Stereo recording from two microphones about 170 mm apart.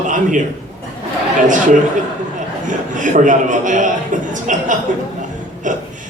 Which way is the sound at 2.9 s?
50° right (ahead or behind).